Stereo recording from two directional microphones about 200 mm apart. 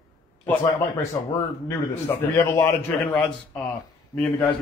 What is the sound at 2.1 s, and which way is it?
A man's voice, 15° left (ahead or behind).